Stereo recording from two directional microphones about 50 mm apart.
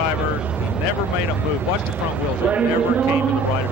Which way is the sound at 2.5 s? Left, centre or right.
Right.